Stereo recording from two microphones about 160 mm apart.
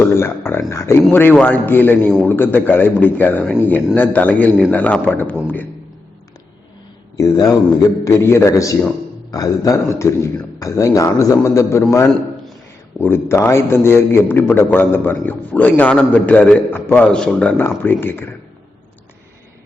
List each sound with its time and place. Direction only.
0.0 s a man's voice: 15° left (ahead or behind)
7.2 s a man's voice: 20° left (ahead or behind)